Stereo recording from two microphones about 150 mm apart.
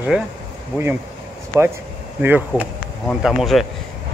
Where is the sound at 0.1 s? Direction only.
10° right (ahead or behind).